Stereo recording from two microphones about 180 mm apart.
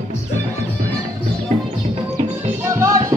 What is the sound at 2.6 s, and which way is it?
Music, 15° right (ahead or behind).